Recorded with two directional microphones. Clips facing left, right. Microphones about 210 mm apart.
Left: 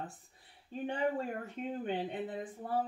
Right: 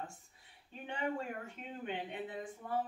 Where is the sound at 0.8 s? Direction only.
35° left (ahead or behind).